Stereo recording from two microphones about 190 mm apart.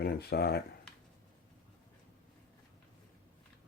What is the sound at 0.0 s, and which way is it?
Speech, 55° left (ahead or behind).